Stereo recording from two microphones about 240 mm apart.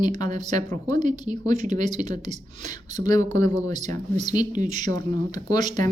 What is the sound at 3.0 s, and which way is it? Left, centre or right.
Speech, centre.